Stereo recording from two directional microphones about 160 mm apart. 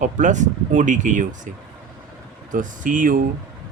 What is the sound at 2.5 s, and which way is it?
Speech, 55° right (ahead or behind).